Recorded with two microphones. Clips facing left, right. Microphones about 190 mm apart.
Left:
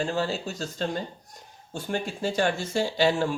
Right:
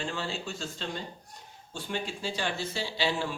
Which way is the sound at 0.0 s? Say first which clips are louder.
Left 7 dB; 40° left (ahead or behind).